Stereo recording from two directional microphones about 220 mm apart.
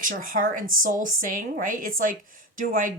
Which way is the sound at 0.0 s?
40° right (ahead or behind).